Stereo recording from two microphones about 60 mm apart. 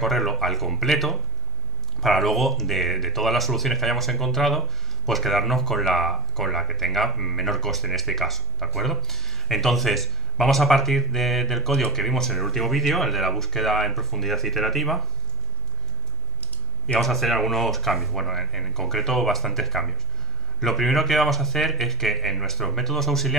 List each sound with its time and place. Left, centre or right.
0.0 s speech: centre
17.0 s speech: centre